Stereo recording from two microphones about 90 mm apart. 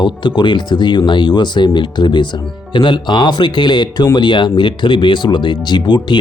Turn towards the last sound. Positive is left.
turn(degrees=60)  # may be behind; listen again after turning